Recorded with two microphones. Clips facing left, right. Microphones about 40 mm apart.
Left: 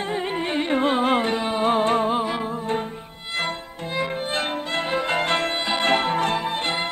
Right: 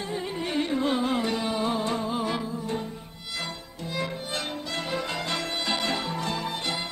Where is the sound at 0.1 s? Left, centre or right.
Left.